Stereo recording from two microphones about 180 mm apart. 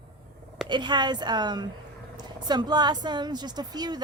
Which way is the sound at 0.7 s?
25° right (ahead or behind).